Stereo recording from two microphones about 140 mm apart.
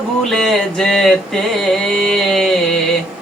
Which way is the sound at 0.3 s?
Centre (ahead or behind).